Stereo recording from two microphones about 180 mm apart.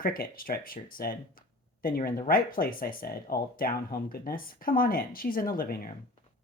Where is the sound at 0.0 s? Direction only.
50° left (ahead or behind).